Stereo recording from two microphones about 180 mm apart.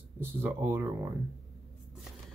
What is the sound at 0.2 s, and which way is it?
Speech, 10° right (ahead or behind).